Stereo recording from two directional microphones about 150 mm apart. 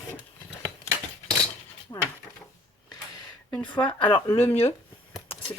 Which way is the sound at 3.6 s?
35° left (ahead or behind).